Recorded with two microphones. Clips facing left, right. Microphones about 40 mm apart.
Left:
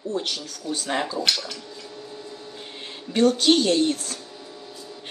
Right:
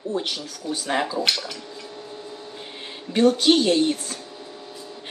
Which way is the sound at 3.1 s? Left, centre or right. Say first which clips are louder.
Right 1 dB; centre.